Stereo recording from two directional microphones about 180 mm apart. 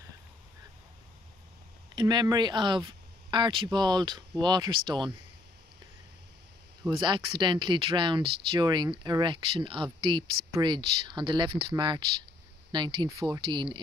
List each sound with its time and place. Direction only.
2.0 s speech: 25° right (ahead or behind)
6.9 s speech: 25° right (ahead or behind)